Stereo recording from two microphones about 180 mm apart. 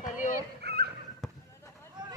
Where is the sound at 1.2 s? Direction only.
Centre (ahead or behind).